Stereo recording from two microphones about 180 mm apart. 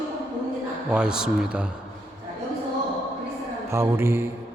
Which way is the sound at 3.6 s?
15° right (ahead or behind).